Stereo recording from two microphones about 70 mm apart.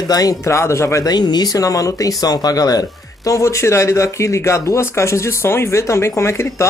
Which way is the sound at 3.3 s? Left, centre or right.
Left.